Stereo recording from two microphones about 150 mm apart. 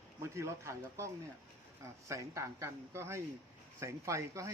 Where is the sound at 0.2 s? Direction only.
20° right (ahead or behind).